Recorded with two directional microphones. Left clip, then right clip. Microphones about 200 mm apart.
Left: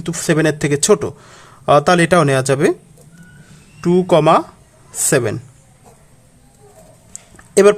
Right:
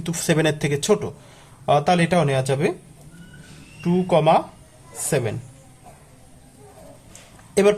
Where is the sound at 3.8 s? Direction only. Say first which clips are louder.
Left 6 dB; 30° left (ahead or behind).